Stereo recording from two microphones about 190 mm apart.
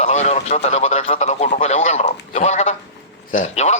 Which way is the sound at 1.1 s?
35° left (ahead or behind).